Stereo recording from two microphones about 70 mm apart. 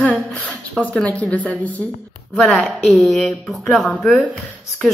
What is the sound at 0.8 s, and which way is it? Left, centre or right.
Speech, centre.